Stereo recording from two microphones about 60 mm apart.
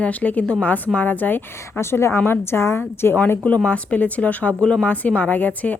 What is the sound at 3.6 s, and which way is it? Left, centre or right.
A woman's voice, left.